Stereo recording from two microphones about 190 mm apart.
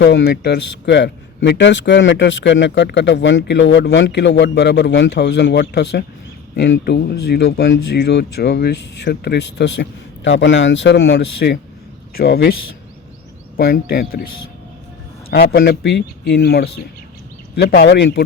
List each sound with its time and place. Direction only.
0.0 s a man's voice: 65° left (ahead or behind)
10.2 s a man's voice: 75° left (ahead or behind); by 12.5 s 55° left (ahead or behind)
13.6 s speech: 55° left (ahead or behind)
15.3 s speech: 55° left (ahead or behind)